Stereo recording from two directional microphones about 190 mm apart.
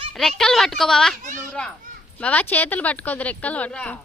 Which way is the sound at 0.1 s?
Centre (ahead or behind).